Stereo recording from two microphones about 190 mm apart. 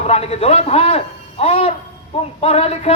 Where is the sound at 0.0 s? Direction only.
35° left (ahead or behind).